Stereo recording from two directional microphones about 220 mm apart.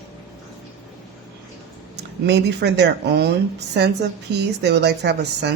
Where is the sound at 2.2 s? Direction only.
50° right (ahead or behind).